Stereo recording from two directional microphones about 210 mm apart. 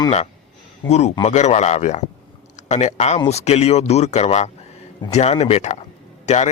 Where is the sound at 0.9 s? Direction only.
30° left (ahead or behind).